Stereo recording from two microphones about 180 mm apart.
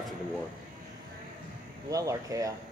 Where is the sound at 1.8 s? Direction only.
20° right (ahead or behind).